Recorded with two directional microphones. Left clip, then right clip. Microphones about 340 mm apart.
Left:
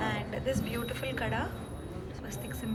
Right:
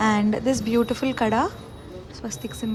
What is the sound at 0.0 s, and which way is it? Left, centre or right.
A woman's voice, centre.